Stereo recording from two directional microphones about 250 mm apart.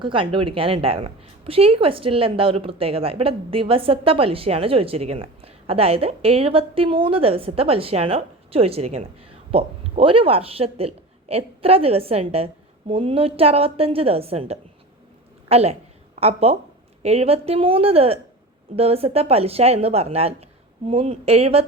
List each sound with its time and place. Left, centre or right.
0.0 s a woman's voice: right